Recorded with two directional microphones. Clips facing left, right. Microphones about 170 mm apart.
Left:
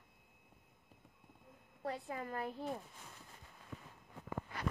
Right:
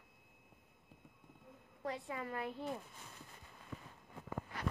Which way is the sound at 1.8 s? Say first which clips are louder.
Even; 40° left (ahead or behind).